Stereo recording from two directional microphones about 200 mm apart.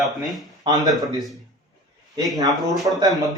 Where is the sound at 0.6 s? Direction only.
20° right (ahead or behind).